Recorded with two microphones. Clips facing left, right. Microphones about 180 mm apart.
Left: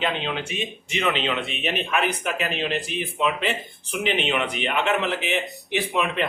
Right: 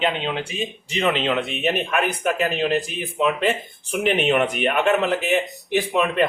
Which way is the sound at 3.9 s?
50° right (ahead or behind).